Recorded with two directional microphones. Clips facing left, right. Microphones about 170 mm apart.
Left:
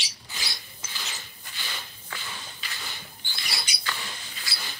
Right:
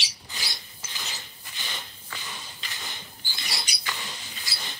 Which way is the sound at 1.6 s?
20° right (ahead or behind).